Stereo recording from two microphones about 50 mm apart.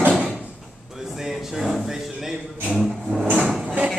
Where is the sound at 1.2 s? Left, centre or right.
Centre.